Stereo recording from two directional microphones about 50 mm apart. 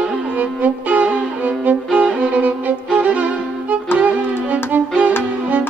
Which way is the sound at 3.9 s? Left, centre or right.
Right.